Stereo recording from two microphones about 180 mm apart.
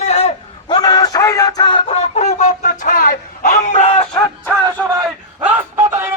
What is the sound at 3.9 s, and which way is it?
Music, 25° left (ahead or behind).